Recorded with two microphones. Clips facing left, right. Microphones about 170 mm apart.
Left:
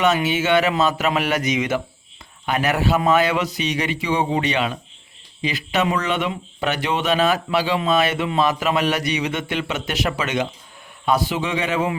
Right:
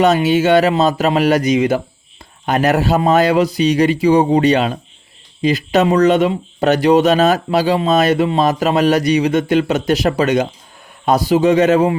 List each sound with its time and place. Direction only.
0.0 s speech: 40° right (ahead or behind)